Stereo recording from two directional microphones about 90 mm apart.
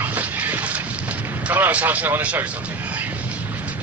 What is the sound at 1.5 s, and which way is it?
Speech, 15° right (ahead or behind).